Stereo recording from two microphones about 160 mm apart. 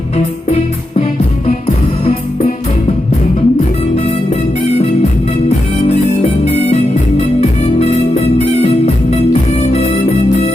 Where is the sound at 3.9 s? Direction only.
40° left (ahead or behind).